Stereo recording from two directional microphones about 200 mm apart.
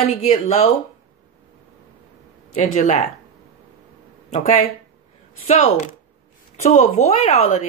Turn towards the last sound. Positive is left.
turn(degrees=35)  # may be behind; listen again after turning